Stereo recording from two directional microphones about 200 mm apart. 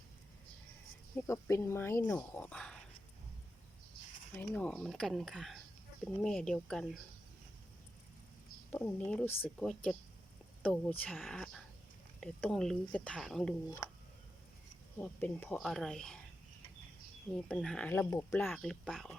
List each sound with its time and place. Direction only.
1.1 s speech: 15° left (ahead or behind)
4.4 s speech: 5° left (ahead or behind)
8.7 s speech: 5° left (ahead or behind)
13.8 s speech: 15° left (ahead or behind)
17.3 s speech: 5° left (ahead or behind)